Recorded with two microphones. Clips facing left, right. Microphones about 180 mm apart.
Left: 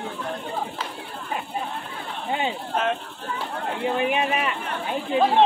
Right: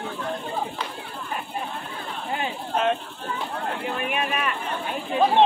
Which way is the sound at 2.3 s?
20° left (ahead or behind).